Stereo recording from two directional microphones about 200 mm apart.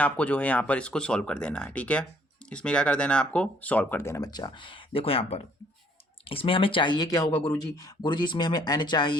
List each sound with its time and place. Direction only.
0.0 s speech: 5° left (ahead or behind)